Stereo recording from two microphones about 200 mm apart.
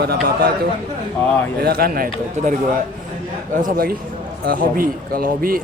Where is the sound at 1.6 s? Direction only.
50° right (ahead or behind).